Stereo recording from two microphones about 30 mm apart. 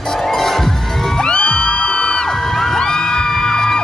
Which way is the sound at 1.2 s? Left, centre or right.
Left.